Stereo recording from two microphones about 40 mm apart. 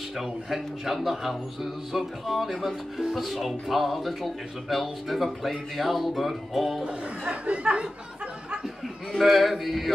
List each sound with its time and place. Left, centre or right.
0.2 s speech: centre
6.8 s speech: right
9.2 s speech: centre